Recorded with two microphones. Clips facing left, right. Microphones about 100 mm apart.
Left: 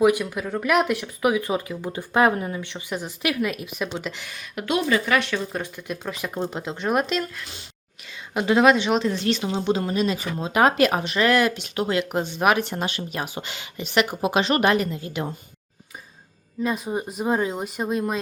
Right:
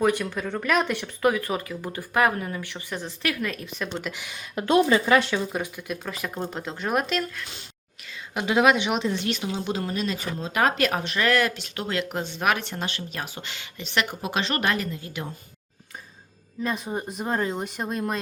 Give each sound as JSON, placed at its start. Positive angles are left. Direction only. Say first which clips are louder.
{"t": 0.0, "sound": "speech", "louder": "left 4 dB", "side_deg": 10}
{"t": 1.3, "sound": "speech", "louder": "left 4 dB", "side_deg": 20}
{"t": 4.1, "sound": "a woman's voice", "louder": "even", "side_deg": -15}
{"t": 4.4, "sound": "speech", "louder": "right 5 dB", "side_deg": -30}
{"t": 5.5, "sound": "a woman's voice", "louder": "even", "side_deg": -10}
{"t": 9.6, "sound": "speech", "louder": "left 7 dB", "side_deg": 0}
{"t": 16.6, "sound": "speech", "louder": "left 3 dB", "side_deg": 5}